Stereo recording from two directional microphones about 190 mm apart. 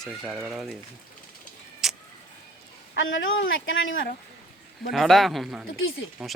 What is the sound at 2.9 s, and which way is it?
Speech, 85° left.